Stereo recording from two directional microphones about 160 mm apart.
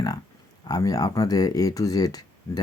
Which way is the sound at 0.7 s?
20° left (ahead or behind).